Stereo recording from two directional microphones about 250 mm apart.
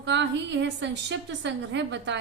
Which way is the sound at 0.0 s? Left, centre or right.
Right.